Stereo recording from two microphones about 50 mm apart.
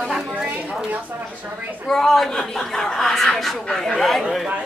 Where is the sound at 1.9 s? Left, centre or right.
Centre.